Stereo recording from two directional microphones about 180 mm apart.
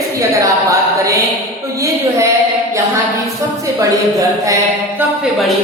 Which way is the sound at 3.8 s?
20° right (ahead or behind).